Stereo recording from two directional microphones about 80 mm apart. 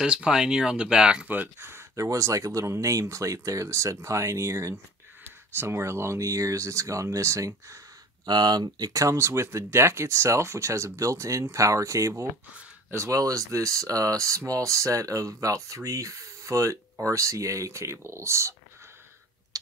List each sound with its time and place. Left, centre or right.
0.0 s speech: centre; by 7.8 s right
8.3 s speech: right
19.5 s a sound: right